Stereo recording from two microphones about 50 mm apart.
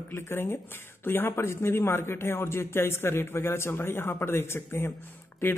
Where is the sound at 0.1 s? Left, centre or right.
Left.